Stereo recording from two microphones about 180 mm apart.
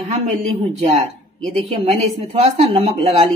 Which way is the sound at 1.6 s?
35° right (ahead or behind).